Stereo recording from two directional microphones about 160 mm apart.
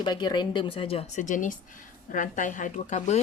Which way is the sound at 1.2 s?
55° left (ahead or behind).